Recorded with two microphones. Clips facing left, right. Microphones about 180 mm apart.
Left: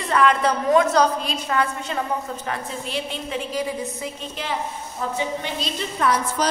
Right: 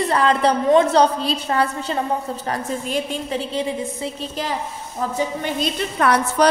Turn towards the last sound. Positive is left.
turn(degrees=-65)  # may be behind; listen again after turning